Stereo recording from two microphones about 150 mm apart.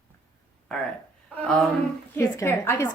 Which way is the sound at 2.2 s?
15° left (ahead or behind).